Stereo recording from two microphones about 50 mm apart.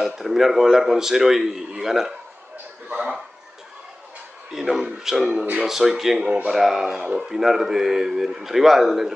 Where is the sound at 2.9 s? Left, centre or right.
Centre.